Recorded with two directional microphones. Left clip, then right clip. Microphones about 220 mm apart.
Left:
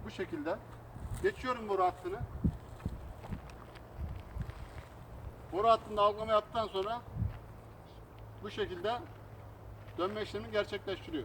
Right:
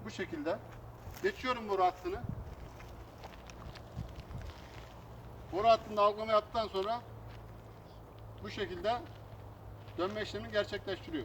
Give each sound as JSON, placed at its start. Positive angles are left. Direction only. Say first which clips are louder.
{"t": 0.0, "sound": "speech", "louder": "even", "side_deg": -15}
{"t": 5.5, "sound": "speech", "louder": "even", "side_deg": -15}
{"t": 8.4, "sound": "speech", "louder": "right 1 dB", "side_deg": -20}
{"t": 10.0, "sound": "speech", "louder": "even", "side_deg": -15}